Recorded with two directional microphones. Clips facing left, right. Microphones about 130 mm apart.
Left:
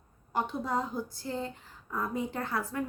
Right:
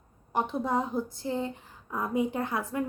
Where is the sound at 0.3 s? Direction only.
20° right (ahead or behind).